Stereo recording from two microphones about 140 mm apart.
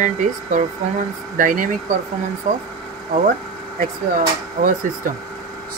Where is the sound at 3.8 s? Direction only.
80° right.